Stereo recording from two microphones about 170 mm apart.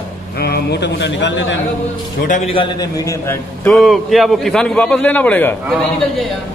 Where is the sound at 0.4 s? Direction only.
70° left (ahead or behind); by 1.6 s 90° left.